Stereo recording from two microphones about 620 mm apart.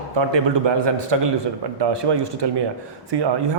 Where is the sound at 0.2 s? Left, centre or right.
Right.